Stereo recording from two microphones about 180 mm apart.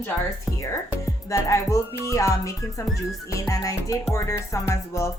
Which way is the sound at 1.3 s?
15° left (ahead or behind).